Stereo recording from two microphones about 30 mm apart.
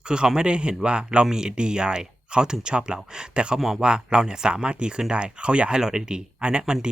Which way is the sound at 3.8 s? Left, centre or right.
Right.